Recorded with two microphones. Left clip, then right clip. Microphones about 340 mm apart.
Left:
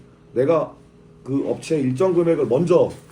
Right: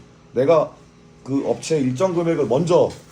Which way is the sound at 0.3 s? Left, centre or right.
Centre.